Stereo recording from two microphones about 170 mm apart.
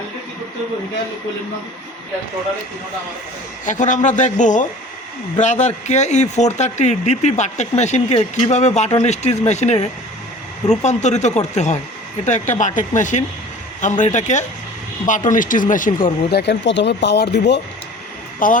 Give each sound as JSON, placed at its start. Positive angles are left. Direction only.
{"t": 3.7, "sound": "speech", "side_deg": 45}
{"t": 16.3, "sound": "speech", "side_deg": 85}
{"t": 18.3, "sound": "speech", "side_deg": 55}